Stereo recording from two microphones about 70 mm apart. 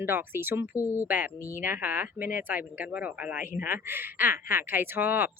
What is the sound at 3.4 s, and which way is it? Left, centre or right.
Speech, right.